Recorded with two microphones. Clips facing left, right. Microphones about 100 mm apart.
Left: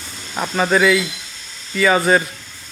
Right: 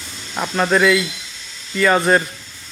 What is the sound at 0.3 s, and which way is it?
A man's voice, centre (ahead or behind).